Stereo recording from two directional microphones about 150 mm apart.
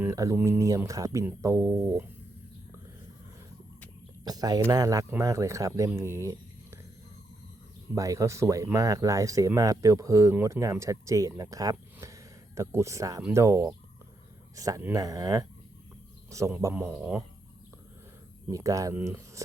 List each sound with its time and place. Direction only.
0.0 s speech: 20° right (ahead or behind)
4.2 s speech: 25° right (ahead or behind)
6.0 s a sound: 20° right (ahead or behind)
7.9 s speech: 20° right (ahead or behind)
16.6 s speech: 15° right (ahead or behind)
18.4 s speech: 20° right (ahead or behind)